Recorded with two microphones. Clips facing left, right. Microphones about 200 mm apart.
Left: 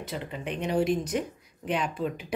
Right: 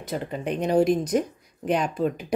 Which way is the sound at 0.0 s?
40° right (ahead or behind).